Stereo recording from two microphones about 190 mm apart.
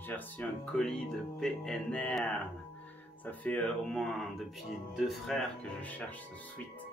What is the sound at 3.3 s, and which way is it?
Speech, 5° left (ahead or behind).